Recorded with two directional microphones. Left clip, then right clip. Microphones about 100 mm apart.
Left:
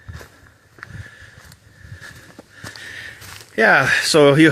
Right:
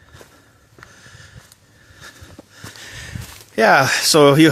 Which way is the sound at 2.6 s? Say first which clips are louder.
Left 3 dB; 30° right (ahead or behind).